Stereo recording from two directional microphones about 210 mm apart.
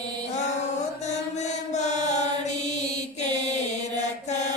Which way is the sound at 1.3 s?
35° left (ahead or behind).